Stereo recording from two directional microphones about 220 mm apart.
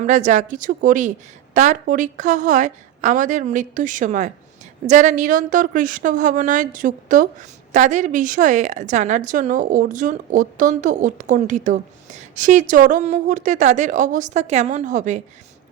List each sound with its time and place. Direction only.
0.0 s speech: 35° right (ahead or behind)